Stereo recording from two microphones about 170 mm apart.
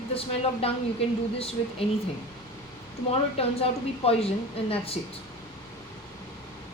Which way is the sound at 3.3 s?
35° left (ahead or behind).